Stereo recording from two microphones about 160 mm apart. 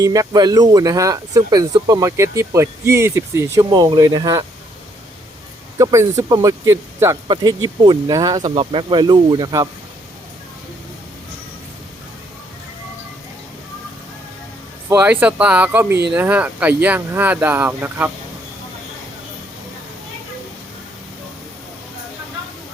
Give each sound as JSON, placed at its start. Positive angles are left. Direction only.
{"t": 0.0, "sound": "speech", "side_deg": -25}
{"t": 5.8, "sound": "speech", "side_deg": -20}
{"t": 14.8, "sound": "speech", "side_deg": -10}